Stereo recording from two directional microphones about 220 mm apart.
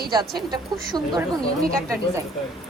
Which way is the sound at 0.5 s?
20° right (ahead or behind).